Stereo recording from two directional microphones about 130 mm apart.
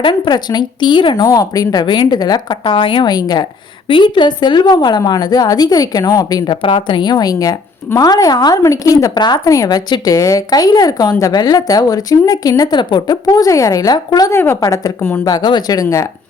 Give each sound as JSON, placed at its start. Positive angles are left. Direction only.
{"t": 0.0, "sound": "a woman's voice", "side_deg": 35}
{"t": 3.8, "sound": "a woman's voice", "side_deg": 40}